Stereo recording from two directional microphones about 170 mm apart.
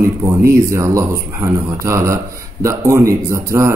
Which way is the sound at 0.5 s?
15° right (ahead or behind).